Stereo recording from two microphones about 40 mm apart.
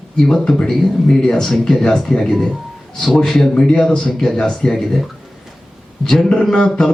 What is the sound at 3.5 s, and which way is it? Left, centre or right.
Speech, left.